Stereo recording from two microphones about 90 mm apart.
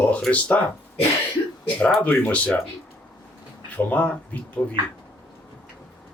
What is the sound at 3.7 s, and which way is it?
Speech, 15° left (ahead or behind).